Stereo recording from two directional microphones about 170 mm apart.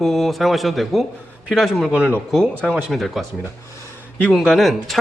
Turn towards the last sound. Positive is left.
turn(degrees=0)  # may be behind; listen again after turning